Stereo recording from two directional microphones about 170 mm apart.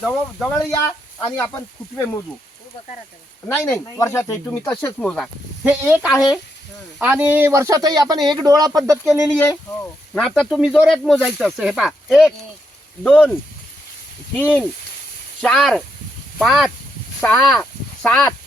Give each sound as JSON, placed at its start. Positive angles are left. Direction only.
{"t": 0.0, "sound": "speech", "side_deg": 0}
{"t": 1.2, "sound": "speech", "side_deg": 15}
{"t": 3.5, "sound": "speech", "side_deg": 15}
{"t": 4.9, "sound": "speech", "side_deg": 0}
{"t": 5.6, "sound": "a man's voice", "side_deg": -10}
{"t": 9.0, "sound": "speech", "side_deg": -5}
{"t": 14.3, "sound": "speech", "side_deg": 10}